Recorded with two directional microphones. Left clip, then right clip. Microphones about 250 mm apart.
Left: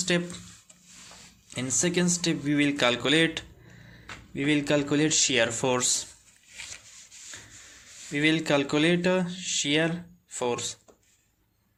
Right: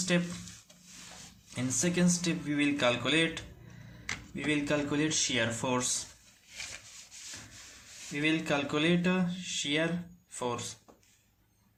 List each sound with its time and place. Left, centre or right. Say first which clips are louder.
0.1 s speech: left 3 dB; left
1.5 s speech: left 5 dB; left
8.1 s speech: left 6 dB; left